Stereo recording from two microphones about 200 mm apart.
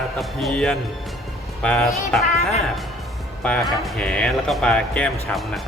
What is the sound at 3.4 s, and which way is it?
Speech, 5° left (ahead or behind).